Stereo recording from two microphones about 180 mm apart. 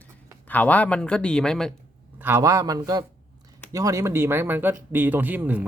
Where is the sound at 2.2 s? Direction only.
15° right (ahead or behind).